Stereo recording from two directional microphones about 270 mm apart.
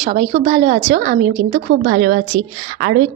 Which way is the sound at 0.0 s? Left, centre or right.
Right.